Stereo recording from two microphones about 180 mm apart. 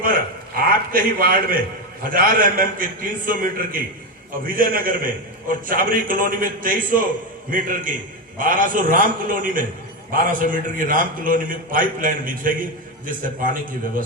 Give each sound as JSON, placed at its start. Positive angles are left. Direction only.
{"t": 0.7, "sound": "a man's voice", "side_deg": -50}